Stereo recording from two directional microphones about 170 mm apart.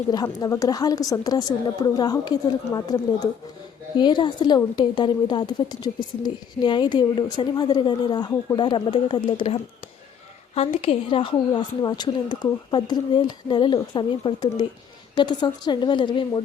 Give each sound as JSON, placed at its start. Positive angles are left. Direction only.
{"t": 0.1, "sound": "a woman's voice", "side_deg": 20}